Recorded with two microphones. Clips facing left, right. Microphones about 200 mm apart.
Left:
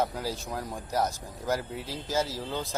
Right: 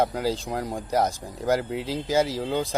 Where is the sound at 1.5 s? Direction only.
90° right.